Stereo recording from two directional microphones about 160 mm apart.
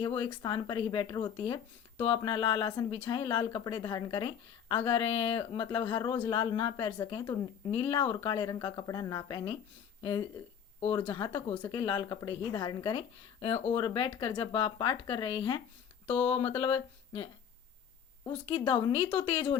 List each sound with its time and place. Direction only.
0.0 s speech: 35° left (ahead or behind)
18.4 s speech: 30° left (ahead or behind)